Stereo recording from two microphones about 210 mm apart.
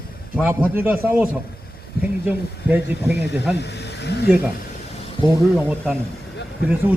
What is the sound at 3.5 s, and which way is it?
Speech, 55° left (ahead or behind).